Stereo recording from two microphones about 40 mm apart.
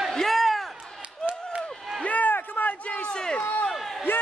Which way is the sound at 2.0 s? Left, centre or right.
Left.